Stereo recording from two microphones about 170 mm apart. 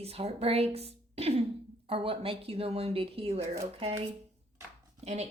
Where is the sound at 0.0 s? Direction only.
35° right (ahead or behind).